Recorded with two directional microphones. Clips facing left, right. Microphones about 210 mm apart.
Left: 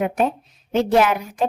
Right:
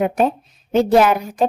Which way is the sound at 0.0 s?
40° right (ahead or behind).